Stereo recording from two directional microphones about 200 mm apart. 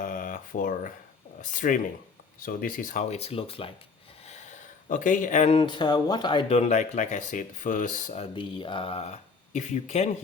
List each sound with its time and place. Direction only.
0.0 s a sound: 40° left (ahead or behind)
1.4 s speech: 40° left (ahead or behind)
4.9 s speech: 40° left (ahead or behind)